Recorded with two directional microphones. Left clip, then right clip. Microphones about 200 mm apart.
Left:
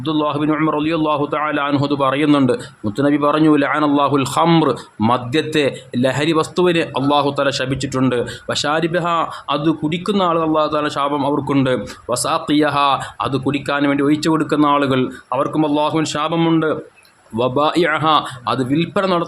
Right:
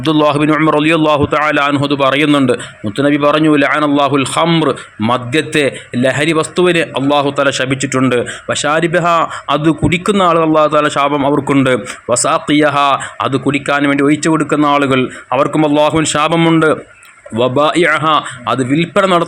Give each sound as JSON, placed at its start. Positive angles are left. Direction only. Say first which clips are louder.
{"t": 0.0, "sound": "a man's voice", "louder": "right 7 dB", "side_deg": -20}